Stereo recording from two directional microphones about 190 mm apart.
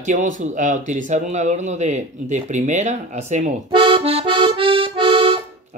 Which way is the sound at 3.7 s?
25° right (ahead or behind).